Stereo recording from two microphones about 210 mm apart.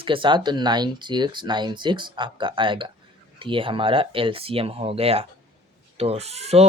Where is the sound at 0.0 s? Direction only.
25° right (ahead or behind).